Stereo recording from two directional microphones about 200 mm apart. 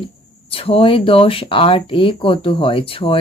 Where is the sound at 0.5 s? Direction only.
30° left (ahead or behind).